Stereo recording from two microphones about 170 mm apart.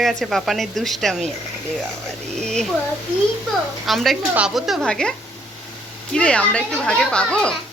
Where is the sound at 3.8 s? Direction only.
Centre (ahead or behind).